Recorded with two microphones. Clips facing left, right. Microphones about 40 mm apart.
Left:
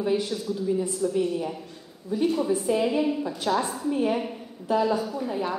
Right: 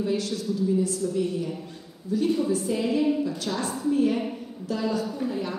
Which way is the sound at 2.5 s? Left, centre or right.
Left.